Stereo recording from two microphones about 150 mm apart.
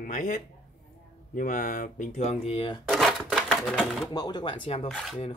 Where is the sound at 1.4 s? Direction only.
65° left (ahead or behind); by 2.8 s 40° left (ahead or behind).